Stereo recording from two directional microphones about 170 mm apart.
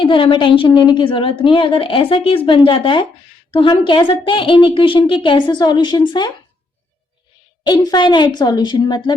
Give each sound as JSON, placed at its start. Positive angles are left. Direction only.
{"t": 0.0, "sound": "a woman's voice", "side_deg": 30}
{"t": 7.6, "sound": "a woman's voice", "side_deg": 25}